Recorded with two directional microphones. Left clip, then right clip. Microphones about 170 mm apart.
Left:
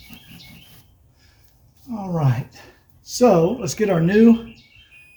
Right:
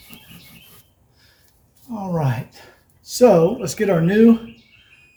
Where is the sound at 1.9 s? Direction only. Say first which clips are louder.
Right 1 dB; 10° left (ahead or behind).